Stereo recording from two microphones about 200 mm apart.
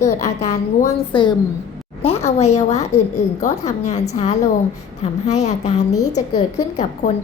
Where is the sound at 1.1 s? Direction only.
25° left (ahead or behind).